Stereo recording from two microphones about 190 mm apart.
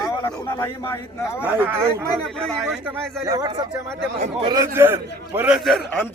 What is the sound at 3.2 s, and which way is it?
A man's voice, 20° right (ahead or behind).